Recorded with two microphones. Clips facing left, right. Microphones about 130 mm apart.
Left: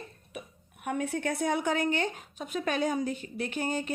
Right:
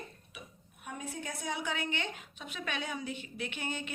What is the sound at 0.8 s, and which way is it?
A woman's voice, 70° left (ahead or behind).